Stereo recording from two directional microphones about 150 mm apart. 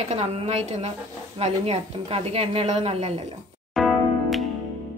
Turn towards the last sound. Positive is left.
turn(degrees=0)  # may be behind; listen again after turning